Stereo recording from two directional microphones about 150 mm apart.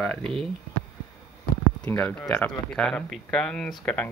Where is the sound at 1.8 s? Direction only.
10° left (ahead or behind).